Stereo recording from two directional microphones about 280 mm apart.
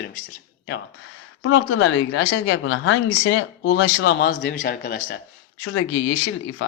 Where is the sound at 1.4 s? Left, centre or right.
Left.